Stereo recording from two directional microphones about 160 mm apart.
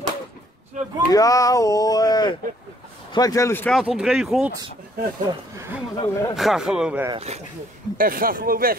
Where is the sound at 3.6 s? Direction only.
5° right (ahead or behind).